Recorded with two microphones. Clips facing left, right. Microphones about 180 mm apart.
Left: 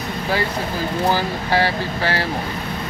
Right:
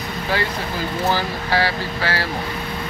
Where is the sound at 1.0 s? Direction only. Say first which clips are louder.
Left 1 dB; 15° left (ahead or behind).